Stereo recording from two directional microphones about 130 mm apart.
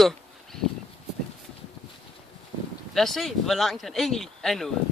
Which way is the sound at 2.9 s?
Centre (ahead or behind).